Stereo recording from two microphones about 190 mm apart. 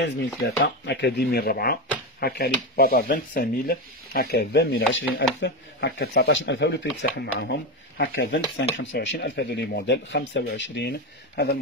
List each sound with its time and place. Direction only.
0.8 s speech: 60° left (ahead or behind)